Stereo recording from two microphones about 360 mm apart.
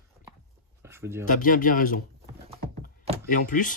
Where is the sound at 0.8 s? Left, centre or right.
Centre.